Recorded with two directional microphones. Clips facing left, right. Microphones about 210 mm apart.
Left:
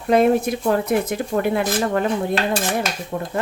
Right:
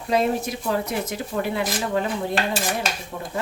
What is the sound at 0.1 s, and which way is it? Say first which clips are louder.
Speech: left 6 dB; 55° left (ahead or behind).